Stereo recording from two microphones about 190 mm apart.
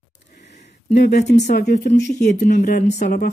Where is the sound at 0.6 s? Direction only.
35° left (ahead or behind).